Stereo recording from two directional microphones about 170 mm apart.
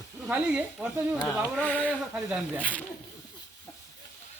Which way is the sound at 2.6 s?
10° left (ahead or behind).